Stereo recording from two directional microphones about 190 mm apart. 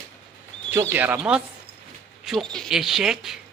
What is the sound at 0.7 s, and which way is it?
A man's voice, 10° right (ahead or behind).